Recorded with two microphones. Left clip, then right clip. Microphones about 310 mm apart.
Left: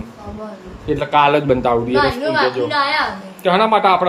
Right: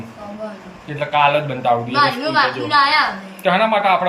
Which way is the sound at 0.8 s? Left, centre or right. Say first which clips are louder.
Left 2 dB; centre.